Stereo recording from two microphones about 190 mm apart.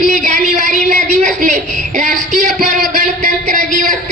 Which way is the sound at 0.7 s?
40° right (ahead or behind).